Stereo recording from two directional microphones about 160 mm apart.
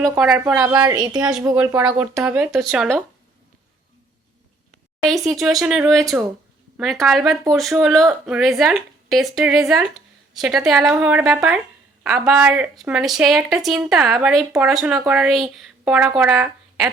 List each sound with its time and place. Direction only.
0.2 s speech: 5° right (ahead or behind)
0.5 s a woman's voice: 20° right (ahead or behind)
1.5 s speech: 10° right (ahead or behind)
5.0 s speech: centre (ahead or behind)